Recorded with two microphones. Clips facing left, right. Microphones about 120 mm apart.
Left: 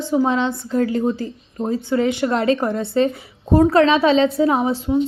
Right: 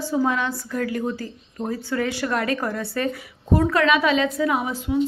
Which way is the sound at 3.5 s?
35° left (ahead or behind).